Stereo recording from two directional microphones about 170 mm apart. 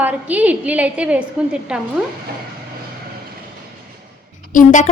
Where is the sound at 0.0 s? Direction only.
10° right (ahead or behind).